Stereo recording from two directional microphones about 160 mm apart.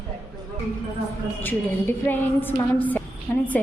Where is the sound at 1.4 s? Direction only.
10° left (ahead or behind).